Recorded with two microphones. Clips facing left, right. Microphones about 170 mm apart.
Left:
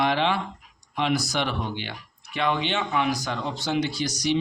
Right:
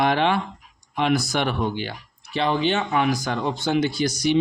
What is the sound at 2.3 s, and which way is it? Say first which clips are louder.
Speech: right 4 dB; 35° right (ahead or behind).